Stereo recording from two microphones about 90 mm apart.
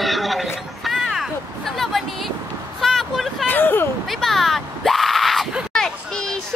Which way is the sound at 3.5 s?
20° left (ahead or behind).